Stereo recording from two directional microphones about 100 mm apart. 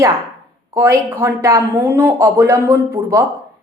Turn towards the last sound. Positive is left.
turn(degrees=-20)  # may be behind; listen again after turning